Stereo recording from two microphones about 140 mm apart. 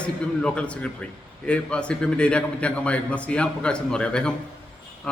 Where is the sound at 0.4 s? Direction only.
10° left (ahead or behind).